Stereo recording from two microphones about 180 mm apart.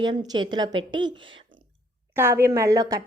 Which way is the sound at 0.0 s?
25° right (ahead or behind).